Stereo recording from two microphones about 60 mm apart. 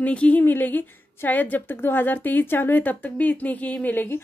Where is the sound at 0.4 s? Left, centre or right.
Left.